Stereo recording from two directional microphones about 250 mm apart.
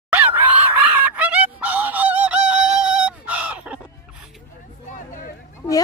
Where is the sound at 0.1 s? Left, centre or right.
Centre.